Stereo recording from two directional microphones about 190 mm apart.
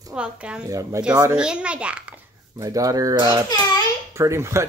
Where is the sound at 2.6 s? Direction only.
20° right (ahead or behind).